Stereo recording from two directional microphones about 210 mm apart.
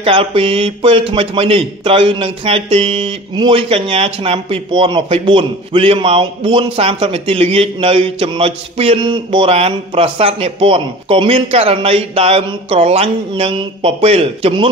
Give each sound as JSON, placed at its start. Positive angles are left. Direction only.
{"t": 0.0, "sound": "a man's voice", "side_deg": -25}